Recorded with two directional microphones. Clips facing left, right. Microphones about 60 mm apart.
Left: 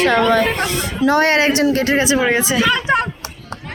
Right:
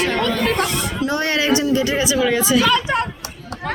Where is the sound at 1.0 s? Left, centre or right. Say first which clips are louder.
Left 6 dB; left.